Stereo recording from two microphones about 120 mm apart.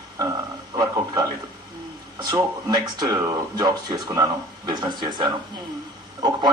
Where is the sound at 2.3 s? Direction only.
35° right (ahead or behind).